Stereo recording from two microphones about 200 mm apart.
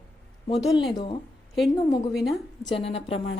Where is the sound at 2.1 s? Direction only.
Centre (ahead or behind).